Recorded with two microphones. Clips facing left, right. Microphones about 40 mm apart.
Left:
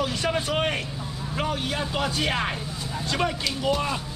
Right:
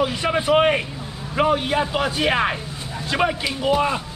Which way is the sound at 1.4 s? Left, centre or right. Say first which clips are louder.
Right 9 dB; right.